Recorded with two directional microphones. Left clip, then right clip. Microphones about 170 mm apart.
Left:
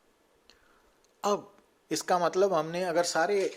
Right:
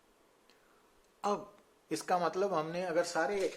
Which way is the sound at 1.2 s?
30° left (ahead or behind).